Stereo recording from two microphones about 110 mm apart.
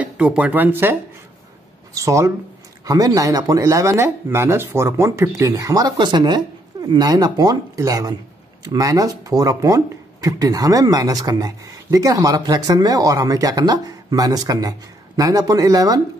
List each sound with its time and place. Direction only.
0.0 s speech: 10° right (ahead or behind)
2.0 s speech: 30° right (ahead or behind)